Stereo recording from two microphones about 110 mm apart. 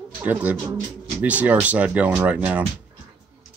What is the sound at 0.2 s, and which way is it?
Speech, 15° right (ahead or behind).